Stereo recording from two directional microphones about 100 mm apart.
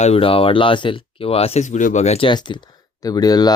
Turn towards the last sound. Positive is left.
turn(degrees=40)  # may be behind; listen again after turning